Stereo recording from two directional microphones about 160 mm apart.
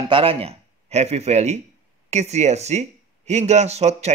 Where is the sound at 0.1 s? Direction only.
35° right (ahead or behind).